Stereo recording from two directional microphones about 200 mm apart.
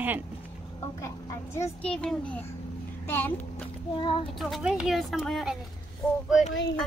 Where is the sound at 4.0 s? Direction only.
25° left (ahead or behind).